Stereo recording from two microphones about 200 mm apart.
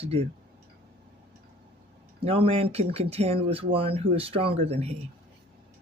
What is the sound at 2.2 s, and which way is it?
Speech, 30° right (ahead or behind).